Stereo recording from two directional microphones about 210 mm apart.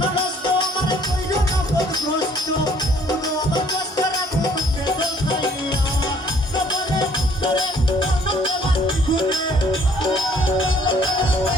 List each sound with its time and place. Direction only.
0.4 s music: 20° left (ahead or behind)
3.5 s music: 20° left (ahead or behind)
7.4 s music: 20° left (ahead or behind)